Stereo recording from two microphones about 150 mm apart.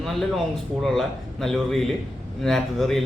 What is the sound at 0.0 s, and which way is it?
A man's voice, centre (ahead or behind).